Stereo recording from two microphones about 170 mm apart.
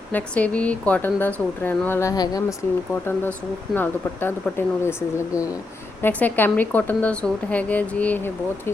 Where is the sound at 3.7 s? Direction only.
10° left (ahead or behind).